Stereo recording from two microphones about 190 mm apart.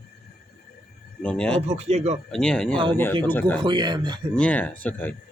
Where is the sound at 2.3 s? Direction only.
5° left (ahead or behind).